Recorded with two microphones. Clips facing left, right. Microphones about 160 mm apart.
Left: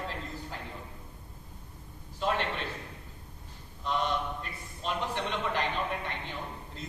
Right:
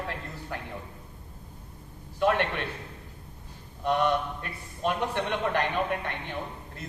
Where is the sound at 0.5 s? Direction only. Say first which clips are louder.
Right 4 dB; 60° right (ahead or behind).